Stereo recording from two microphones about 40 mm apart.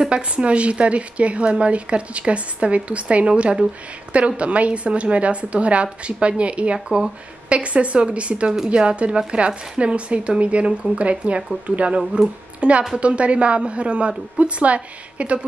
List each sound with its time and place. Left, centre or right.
0.0 s a woman's voice: right